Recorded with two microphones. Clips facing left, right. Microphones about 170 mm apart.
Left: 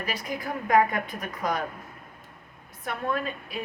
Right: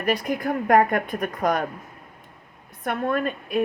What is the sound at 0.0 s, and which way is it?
A woman's voice, 55° right (ahead or behind).